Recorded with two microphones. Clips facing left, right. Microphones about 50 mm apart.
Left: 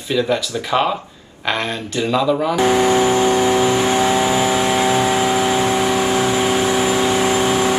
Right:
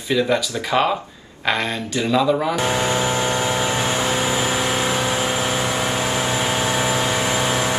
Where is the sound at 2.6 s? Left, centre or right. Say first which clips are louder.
Left 6 dB; left.